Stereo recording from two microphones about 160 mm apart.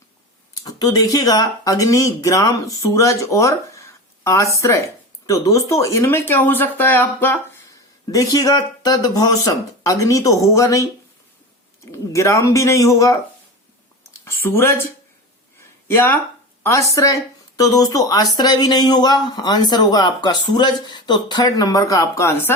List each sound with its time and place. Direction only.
0.5 s speech: 25° left (ahead or behind)
11.9 s speech: 20° left (ahead or behind)
14.4 s speech: 15° left (ahead or behind)
15.5 s a sound: 15° left (ahead or behind)
16.6 s speech: 20° left (ahead or behind)